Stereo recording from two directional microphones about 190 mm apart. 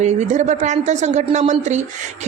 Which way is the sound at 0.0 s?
35° right (ahead or behind).